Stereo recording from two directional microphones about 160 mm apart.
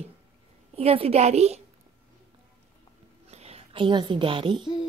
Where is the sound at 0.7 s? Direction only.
40° right (ahead or behind).